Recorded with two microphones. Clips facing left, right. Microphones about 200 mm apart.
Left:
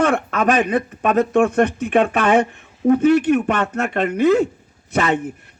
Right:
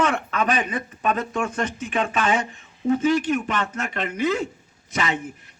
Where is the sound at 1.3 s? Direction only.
60° left (ahead or behind).